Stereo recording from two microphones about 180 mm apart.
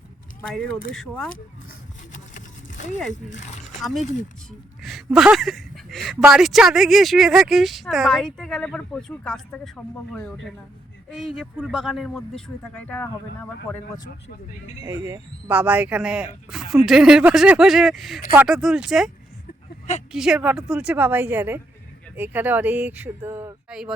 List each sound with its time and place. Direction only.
0.9 s speech: 5° left (ahead or behind)
2.1 s a sound: 45° left (ahead or behind)
3.2 s speech: 40° left (ahead or behind)
4.8 s speech: centre (ahead or behind)
14.8 s speech: 15° right (ahead or behind)
20.1 s speech: 5° right (ahead or behind)